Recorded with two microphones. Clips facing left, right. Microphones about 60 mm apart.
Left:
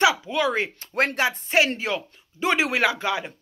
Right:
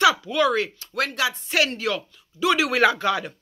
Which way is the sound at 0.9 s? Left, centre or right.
Left.